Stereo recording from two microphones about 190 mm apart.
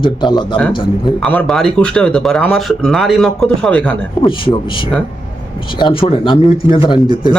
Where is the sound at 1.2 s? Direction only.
5° left (ahead or behind).